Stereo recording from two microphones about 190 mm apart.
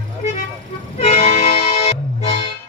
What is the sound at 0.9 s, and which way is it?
Music, 35° left (ahead or behind).